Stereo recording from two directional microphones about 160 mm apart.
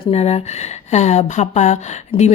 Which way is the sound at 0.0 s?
40° left (ahead or behind).